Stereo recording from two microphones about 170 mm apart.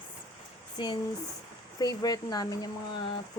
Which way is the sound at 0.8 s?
25° left (ahead or behind).